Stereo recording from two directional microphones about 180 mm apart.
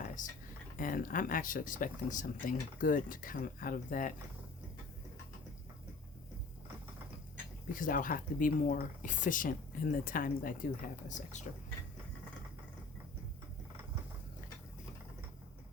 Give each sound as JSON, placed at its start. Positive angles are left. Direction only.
{"t": 0.2, "sound": "speech", "side_deg": 45}
{"t": 7.7, "sound": "speech", "side_deg": 50}